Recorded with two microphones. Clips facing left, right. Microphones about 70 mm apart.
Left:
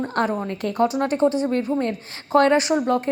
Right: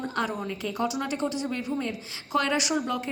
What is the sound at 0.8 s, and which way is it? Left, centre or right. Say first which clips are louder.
A woman's voice: left 10 dB; left.